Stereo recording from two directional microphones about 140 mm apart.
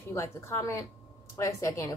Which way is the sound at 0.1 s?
20° left (ahead or behind).